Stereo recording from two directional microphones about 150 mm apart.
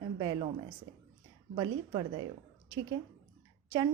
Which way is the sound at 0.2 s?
30° right (ahead or behind).